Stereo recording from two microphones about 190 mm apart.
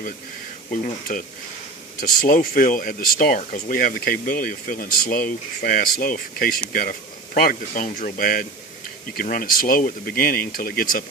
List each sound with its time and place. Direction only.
0.7 s speech: 45° left (ahead or behind)